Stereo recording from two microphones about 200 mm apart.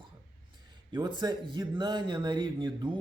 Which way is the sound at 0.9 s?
20° right (ahead or behind).